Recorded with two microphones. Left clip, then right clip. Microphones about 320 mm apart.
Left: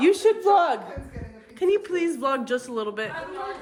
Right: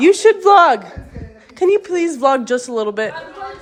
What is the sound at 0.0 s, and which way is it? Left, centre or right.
Speech, right.